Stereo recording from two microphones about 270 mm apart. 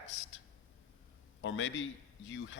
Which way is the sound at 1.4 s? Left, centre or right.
Left.